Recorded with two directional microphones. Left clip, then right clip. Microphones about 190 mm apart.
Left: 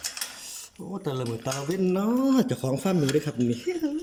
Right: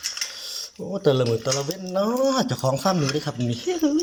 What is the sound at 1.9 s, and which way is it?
Speech, 20° left (ahead or behind).